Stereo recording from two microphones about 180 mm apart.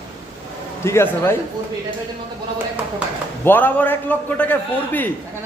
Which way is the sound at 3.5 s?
10° left (ahead or behind).